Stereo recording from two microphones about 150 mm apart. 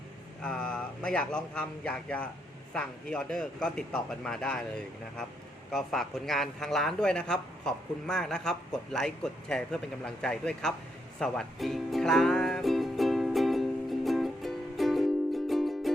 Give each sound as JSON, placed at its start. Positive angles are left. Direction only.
{"t": 0.4, "sound": "a man's voice", "side_deg": 5}
{"t": 11.2, "sound": "music", "side_deg": 0}